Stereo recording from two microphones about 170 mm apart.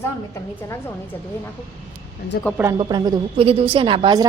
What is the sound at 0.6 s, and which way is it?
Speech, 15° left (ahead or behind).